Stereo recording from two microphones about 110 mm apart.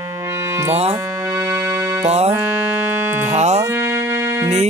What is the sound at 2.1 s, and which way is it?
Music, 75° right (ahead or behind).